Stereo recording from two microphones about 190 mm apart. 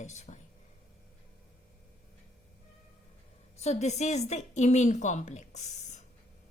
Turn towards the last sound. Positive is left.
turn(degrees=40)  # may be behind; listen again after turning